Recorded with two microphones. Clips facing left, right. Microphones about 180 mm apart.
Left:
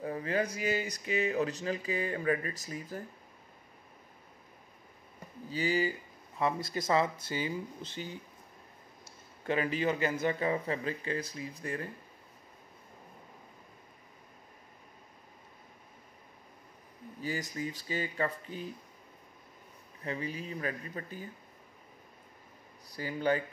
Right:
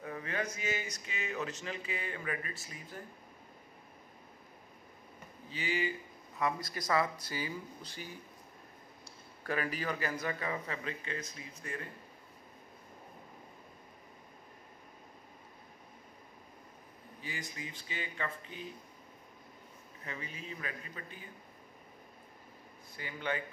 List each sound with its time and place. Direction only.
0.0 s speech: 35° left (ahead or behind)
5.5 s speech: 40° left (ahead or behind)
9.4 s speech: 25° left (ahead or behind)
17.2 s speech: 40° left (ahead or behind)
20.0 s speech: 35° left (ahead or behind)
22.8 s speech: 35° left (ahead or behind)